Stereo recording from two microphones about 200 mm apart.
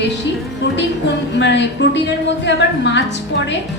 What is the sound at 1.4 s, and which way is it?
Speech, 60° left (ahead or behind).